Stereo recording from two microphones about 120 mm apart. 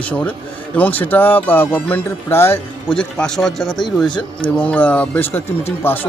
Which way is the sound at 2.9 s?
5° left (ahead or behind).